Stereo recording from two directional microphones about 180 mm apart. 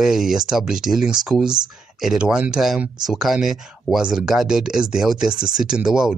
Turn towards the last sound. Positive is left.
turn(degrees=-5)  # may be behind; listen again after turning